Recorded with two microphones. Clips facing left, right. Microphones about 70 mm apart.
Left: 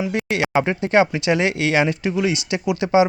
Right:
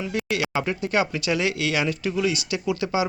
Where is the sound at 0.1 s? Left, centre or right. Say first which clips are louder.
Left 5 dB; left.